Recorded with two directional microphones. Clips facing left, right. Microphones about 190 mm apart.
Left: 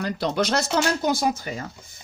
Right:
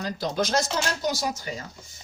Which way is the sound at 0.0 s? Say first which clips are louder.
Left 3 dB; 65° left (ahead or behind).